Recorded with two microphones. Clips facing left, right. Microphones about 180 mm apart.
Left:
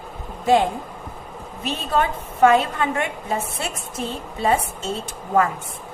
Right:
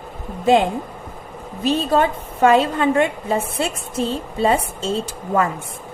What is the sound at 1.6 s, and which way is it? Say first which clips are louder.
A woman's voice: right 5 dB; 30° right (ahead or behind).